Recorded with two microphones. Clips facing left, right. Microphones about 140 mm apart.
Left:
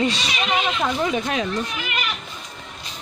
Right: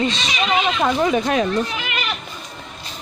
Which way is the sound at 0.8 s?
60° right (ahead or behind).